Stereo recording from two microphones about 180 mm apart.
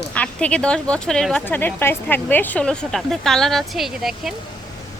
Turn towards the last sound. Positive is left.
turn(degrees=0)  # may be behind; listen again after turning